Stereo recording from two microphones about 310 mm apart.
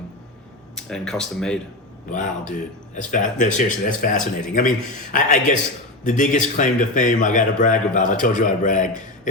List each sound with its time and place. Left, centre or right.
0.8 s speech: centre
2.1 s a man's voice: left